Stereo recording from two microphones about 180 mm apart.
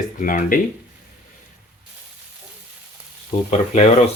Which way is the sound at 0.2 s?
45° left (ahead or behind).